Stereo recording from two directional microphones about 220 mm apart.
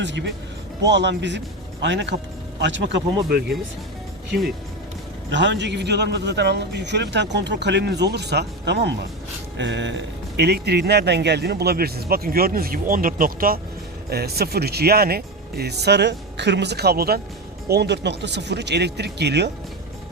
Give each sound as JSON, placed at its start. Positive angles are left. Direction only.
{"t": 0.0, "sound": "a man's voice", "side_deg": -55}
{"t": 5.3, "sound": "a man's voice", "side_deg": -55}